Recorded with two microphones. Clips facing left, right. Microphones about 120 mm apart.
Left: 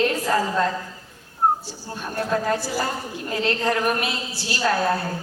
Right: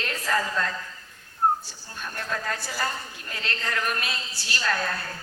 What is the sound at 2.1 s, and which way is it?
A woman's voice, 30° left (ahead or behind).